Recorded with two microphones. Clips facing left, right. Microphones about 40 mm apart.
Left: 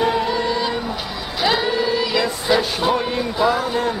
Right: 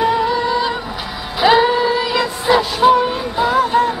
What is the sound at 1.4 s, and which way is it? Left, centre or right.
Music, centre.